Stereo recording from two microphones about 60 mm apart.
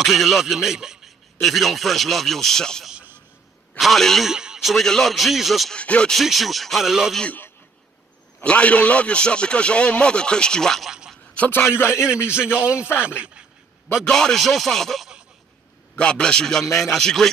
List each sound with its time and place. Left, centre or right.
0.0 s speech: centre
4.3 s a man's voice: centre
5.8 s speech: centre
6.2 s speech: centre
8.5 s a man's voice: left
10.9 s a sound: centre
11.3 s a man's voice: left
11.9 s a man's voice: centre
14.0 s speech: centre
16.0 s a man's voice: centre